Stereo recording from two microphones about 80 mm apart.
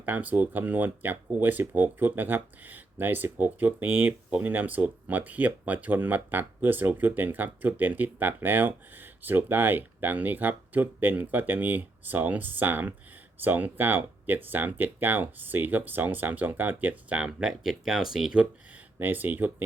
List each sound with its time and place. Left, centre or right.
0.0 s speech: right
18.9 s speech: right